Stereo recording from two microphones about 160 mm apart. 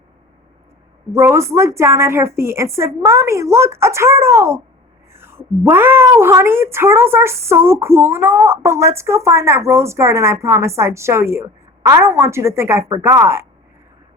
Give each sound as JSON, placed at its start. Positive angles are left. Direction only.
{"t": 1.1, "sound": "a woman's voice", "side_deg": -15}